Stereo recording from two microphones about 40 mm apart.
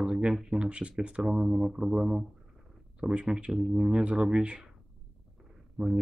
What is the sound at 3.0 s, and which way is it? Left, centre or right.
Speech, right.